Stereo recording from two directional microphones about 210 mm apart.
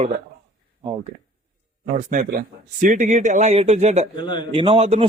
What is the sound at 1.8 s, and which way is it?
A man's voice, 40° right (ahead or behind).